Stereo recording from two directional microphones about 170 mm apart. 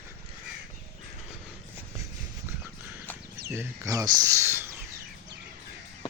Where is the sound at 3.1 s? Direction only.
10° left (ahead or behind).